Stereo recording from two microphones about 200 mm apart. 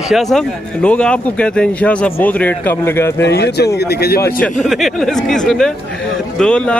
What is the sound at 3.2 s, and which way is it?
Speech, 55° left (ahead or behind).